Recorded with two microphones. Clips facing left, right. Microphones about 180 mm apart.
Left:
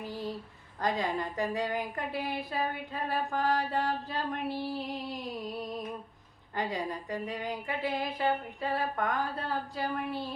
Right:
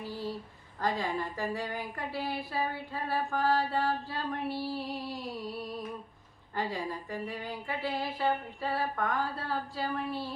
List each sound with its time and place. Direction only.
0.8 s speech: 20° left (ahead or behind)